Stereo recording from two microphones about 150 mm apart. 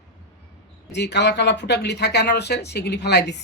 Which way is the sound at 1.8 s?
90° left.